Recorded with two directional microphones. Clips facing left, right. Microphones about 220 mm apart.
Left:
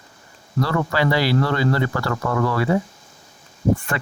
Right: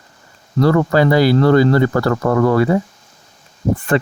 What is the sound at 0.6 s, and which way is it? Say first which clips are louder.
Speech: right 8 dB; 45° right (ahead or behind).